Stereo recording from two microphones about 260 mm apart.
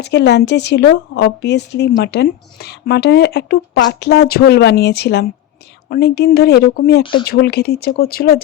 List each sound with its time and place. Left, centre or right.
0.0 s speech: left
7.0 s speech: centre
7.3 s speech: left